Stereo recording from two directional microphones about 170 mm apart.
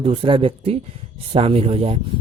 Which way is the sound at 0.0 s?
30° right (ahead or behind).